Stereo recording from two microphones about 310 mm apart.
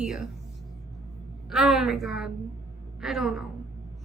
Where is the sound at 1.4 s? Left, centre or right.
Centre.